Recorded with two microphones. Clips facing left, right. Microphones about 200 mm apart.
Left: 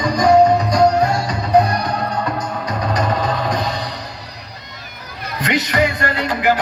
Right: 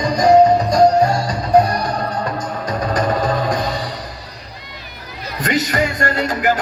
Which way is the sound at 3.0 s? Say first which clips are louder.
Right 3 dB; 50° right (ahead or behind).